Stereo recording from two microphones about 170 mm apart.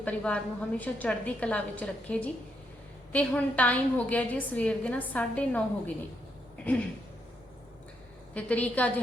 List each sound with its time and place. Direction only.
0.0 s a woman's voice: 5° left (ahead or behind)
8.3 s a woman's voice: 10° left (ahead or behind)